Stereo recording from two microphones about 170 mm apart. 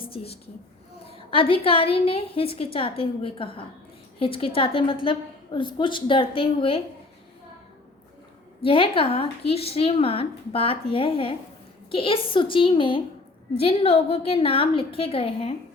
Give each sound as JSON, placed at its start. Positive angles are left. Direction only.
{"t": 0.0, "sound": "a sound", "side_deg": 35}
{"t": 1.0, "sound": "a woman's voice", "side_deg": 30}
{"t": 8.6, "sound": "a woman's voice", "side_deg": 30}